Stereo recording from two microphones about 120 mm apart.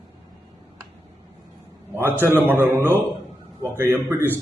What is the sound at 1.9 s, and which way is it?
A man's voice, 15° right (ahead or behind).